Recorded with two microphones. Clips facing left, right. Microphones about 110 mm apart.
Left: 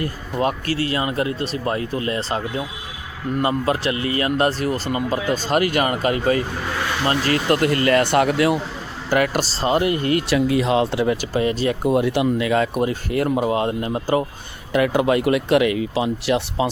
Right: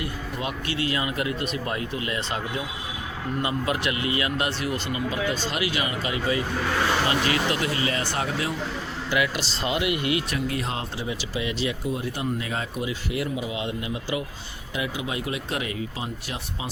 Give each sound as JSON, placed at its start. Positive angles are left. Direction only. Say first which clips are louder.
{"t": 0.0, "sound": "speech", "louder": "left 8 dB", "side_deg": 45}
{"t": 3.4, "sound": "speech", "louder": "left 6 dB", "side_deg": 35}
{"t": 9.0, "sound": "speech", "louder": "left 7 dB", "side_deg": 45}
{"t": 10.7, "sound": "speech", "louder": "left 12 dB", "side_deg": 80}
{"t": 11.8, "sound": "speech", "louder": "left 10 dB", "side_deg": 65}
{"t": 12.8, "sound": "speech", "louder": "left 8 dB", "side_deg": 50}
{"t": 14.7, "sound": "speech", "louder": "left 13 dB", "side_deg": 60}